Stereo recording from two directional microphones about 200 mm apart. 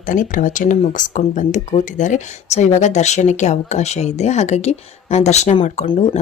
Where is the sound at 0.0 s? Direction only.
40° left (ahead or behind).